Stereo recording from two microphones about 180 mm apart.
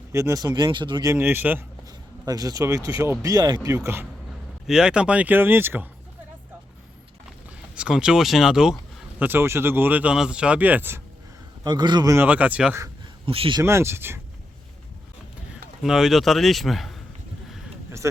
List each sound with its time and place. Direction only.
0.1 s speech: 15° right (ahead or behind)
1.1 s speech: 10° right (ahead or behind)
4.6 s speech: 5° right (ahead or behind)
7.8 s speech: 5° right (ahead or behind)
11.6 s speech: 25° right (ahead or behind); by 12.8 s 5° right (ahead or behind)
13.2 s speech: 30° right (ahead or behind)
13.6 s speech: 15° right (ahead or behind)
15.8 s speech: centre (ahead or behind)
18.0 s speech: 15° right (ahead or behind)